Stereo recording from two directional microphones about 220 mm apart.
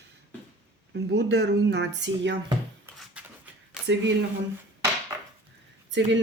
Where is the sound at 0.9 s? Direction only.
50° right (ahead or behind).